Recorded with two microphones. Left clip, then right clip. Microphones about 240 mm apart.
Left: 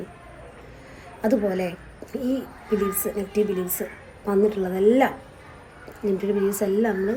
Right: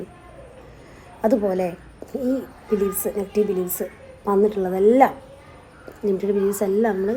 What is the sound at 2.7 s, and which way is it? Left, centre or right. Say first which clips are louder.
A woman's voice: right 2 dB; centre.